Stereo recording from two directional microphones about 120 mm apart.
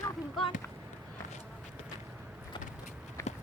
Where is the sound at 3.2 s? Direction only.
25° left (ahead or behind).